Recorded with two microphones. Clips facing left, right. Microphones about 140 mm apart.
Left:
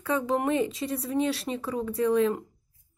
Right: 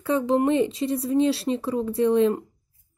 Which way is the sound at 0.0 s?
30° right (ahead or behind).